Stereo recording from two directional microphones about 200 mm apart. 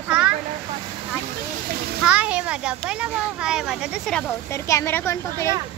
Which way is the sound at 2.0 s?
5° right (ahead or behind).